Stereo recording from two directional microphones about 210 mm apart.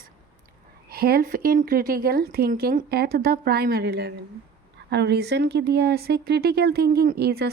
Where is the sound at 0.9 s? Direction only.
45° right (ahead or behind).